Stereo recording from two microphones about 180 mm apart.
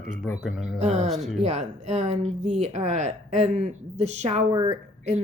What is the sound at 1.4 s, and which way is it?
Speech, 40° right (ahead or behind).